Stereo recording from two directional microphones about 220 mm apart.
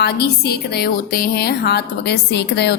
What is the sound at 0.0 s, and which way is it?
A woman's voice, 45° left (ahead or behind).